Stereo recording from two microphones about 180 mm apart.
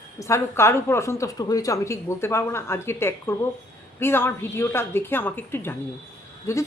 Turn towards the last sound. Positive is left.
turn(degrees=15)  # may be behind; listen again after turning